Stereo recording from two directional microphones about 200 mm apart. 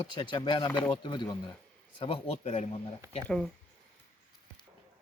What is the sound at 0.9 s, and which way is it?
Speech, 25° left (ahead or behind).